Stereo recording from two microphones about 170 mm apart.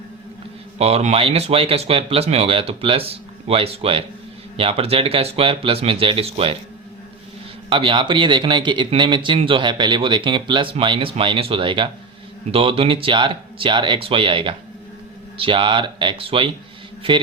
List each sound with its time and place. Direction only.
0.8 s speech: 35° right (ahead or behind)
7.7 s speech: 30° right (ahead or behind)